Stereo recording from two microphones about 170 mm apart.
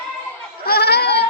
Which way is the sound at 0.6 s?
65° left (ahead or behind).